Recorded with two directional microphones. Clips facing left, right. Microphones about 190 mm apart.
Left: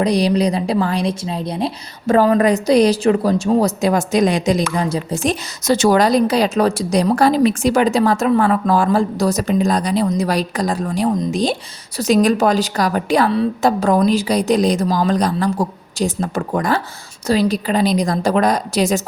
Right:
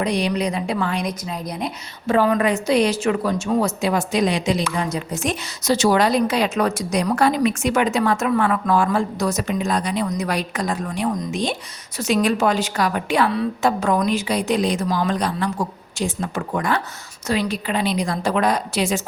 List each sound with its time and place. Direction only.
0.0 s a woman's voice: 35° left (ahead or behind)
4.9 s a woman's voice: 30° left (ahead or behind)
5.6 s a woman's voice: 50° left (ahead or behind)